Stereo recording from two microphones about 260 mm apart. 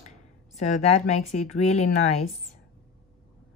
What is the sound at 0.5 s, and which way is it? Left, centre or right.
Speech, left.